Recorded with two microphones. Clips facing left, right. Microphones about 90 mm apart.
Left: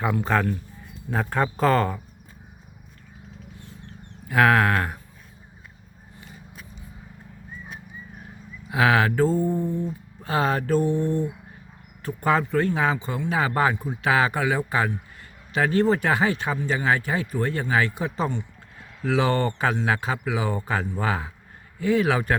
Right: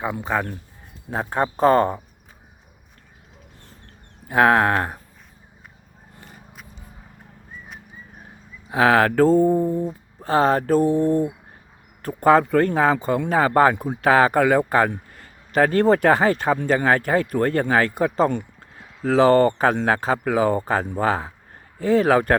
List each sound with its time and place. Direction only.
0.0 s speech: 15° right (ahead or behind)
1.1 s speech: 25° right (ahead or behind)
4.3 s speech: 30° right (ahead or behind)
6.1 s a sound: 45° right (ahead or behind)
8.7 s mantra: 35° right (ahead or behind)
12.0 s a man's voice: 40° right (ahead or behind)
19.0 s mantra: 40° right (ahead or behind)
21.8 s a man's voice: 35° right (ahead or behind)